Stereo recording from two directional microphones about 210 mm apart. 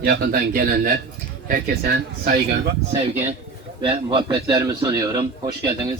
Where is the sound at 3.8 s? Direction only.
25° right (ahead or behind).